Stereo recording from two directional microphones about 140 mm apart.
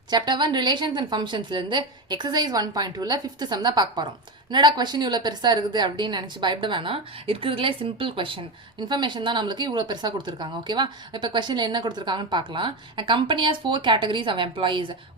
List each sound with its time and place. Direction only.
0.1 s a woman's voice: 30° right (ahead or behind)